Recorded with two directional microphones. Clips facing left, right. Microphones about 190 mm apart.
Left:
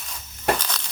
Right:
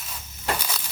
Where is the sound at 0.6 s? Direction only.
10° right (ahead or behind).